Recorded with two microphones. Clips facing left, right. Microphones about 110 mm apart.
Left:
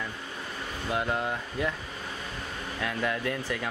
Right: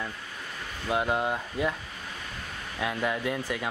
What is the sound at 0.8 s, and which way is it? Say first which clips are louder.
Speech: right 3 dB; 15° right (ahead or behind).